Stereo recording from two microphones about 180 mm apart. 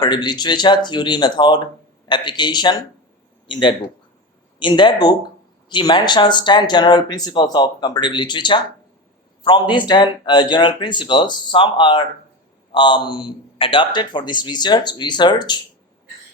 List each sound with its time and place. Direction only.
0.0 s speech: 25° left (ahead or behind)